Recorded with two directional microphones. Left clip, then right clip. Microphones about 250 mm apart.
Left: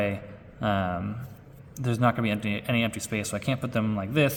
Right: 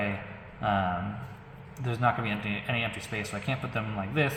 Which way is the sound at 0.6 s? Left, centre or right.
Left.